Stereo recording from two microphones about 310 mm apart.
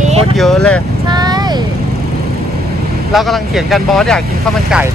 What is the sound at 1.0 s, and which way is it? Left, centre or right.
Vehicle, centre.